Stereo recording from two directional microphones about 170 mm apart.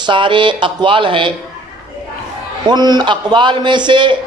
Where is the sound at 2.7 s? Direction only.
25° right (ahead or behind).